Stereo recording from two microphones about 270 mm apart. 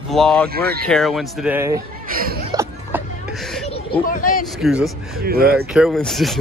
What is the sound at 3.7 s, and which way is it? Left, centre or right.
Speech, left.